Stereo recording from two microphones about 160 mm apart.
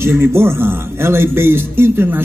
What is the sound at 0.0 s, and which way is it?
A man's voice, 15° right (ahead or behind).